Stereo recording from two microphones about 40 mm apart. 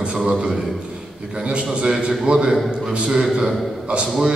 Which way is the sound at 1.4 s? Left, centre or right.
Right.